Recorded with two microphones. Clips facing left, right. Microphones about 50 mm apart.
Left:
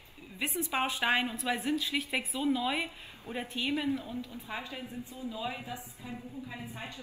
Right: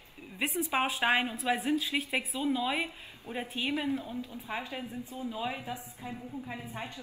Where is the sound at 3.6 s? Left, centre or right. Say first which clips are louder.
Even; right.